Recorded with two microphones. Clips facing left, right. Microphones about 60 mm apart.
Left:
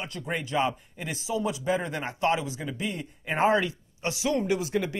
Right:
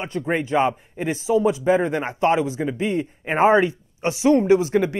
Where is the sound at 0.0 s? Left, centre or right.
Right.